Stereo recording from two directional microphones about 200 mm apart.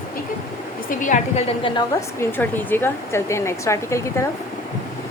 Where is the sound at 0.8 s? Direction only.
40° left (ahead or behind).